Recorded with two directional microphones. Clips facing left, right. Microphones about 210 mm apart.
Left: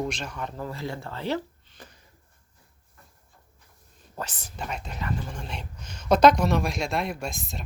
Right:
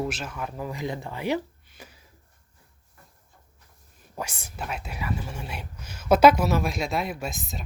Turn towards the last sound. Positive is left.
turn(degrees=0)  # may be behind; listen again after turning